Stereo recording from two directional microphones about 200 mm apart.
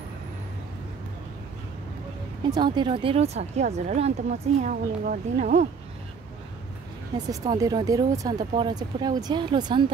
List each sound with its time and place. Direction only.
2.5 s speech: 20° right (ahead or behind)
7.2 s speech: 20° right (ahead or behind)